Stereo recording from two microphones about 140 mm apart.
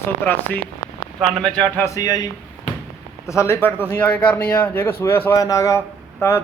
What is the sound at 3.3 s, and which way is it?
Speech, 20° left (ahead or behind).